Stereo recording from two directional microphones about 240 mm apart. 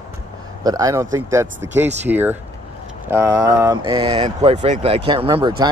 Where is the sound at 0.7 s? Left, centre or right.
Centre.